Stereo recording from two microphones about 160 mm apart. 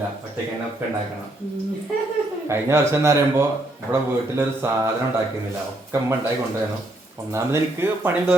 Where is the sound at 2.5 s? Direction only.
15° right (ahead or behind).